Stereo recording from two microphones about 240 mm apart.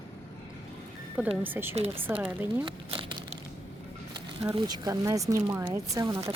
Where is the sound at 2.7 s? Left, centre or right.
Right.